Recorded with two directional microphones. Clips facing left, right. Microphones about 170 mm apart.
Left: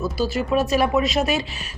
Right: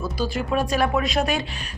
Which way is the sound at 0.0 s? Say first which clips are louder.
Left 3 dB; 5° left (ahead or behind).